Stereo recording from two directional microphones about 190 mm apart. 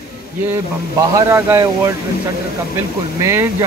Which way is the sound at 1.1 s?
15° right (ahead or behind).